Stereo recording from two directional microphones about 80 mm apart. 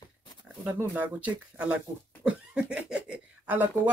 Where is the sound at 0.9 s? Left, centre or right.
Centre.